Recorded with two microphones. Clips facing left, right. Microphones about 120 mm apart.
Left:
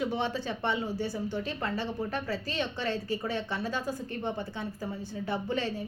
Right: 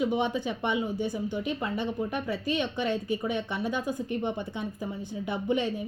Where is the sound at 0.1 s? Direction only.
15° right (ahead or behind).